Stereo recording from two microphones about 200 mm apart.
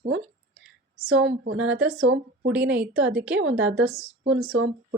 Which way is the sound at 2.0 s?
90° right.